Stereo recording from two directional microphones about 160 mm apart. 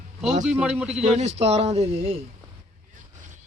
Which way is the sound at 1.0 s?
45° right (ahead or behind).